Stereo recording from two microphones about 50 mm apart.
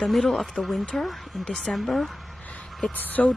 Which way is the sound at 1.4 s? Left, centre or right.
Centre.